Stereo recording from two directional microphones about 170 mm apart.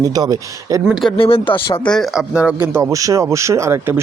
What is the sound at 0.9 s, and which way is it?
Speech, centre (ahead or behind).